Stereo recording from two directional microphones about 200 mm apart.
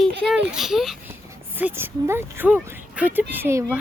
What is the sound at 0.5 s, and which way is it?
A child's voice, centre (ahead or behind).